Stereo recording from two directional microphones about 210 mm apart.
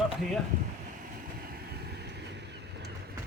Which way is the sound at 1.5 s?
50° right (ahead or behind).